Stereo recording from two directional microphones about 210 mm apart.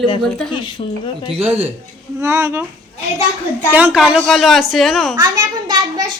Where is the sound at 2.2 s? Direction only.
15° right (ahead or behind).